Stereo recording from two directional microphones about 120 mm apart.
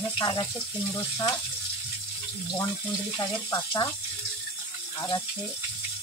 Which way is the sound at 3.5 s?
35° left (ahead or behind).